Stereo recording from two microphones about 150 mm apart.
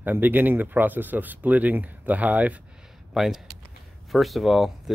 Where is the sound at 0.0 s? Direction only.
10° right (ahead or behind).